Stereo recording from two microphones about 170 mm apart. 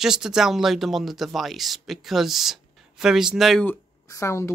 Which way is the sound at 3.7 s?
15° left (ahead or behind).